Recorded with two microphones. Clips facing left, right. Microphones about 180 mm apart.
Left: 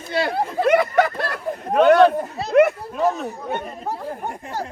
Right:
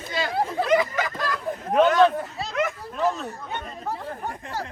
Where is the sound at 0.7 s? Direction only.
60° left (ahead or behind).